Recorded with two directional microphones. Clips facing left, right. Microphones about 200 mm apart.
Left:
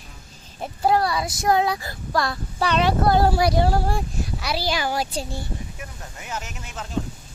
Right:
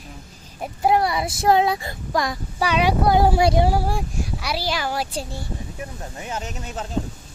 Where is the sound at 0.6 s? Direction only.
15° right (ahead or behind); by 5.2 s centre (ahead or behind).